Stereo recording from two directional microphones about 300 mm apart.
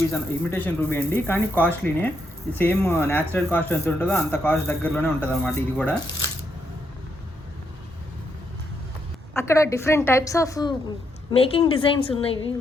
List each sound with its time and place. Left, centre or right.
0.1 s speech: centre
9.3 s a woman's voice: centre